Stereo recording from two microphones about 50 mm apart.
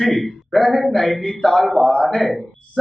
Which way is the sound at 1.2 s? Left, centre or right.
Centre.